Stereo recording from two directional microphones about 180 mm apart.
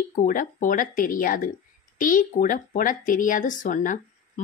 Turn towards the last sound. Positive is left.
turn(degrees=45)  # may be behind; listen again after turning